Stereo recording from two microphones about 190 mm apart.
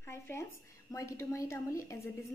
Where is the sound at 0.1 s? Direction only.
15° left (ahead or behind).